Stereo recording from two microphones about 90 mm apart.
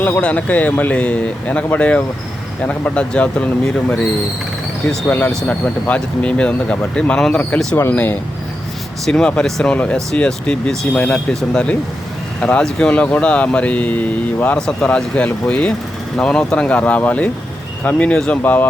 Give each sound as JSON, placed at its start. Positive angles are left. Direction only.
{"t": 0.2, "sound": "speech", "side_deg": 15}
{"t": 5.3, "sound": "speech", "side_deg": 10}
{"t": 9.0, "sound": "speech", "side_deg": 10}